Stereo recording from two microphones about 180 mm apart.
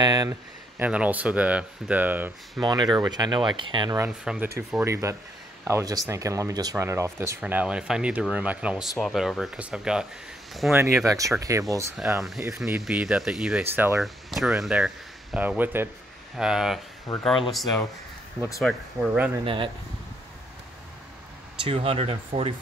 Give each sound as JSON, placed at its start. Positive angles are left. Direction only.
{"t": 0.0, "sound": "speech", "side_deg": -20}
{"t": 0.7, "sound": "speech", "side_deg": -10}
{"t": 2.6, "sound": "speech", "side_deg": -25}
{"t": 4.1, "sound": "speech", "side_deg": -5}
{"t": 12.2, "sound": "speech", "side_deg": 0}
{"t": 19.4, "sound": "speech", "side_deg": -30}
{"t": 21.6, "sound": "speech", "side_deg": -35}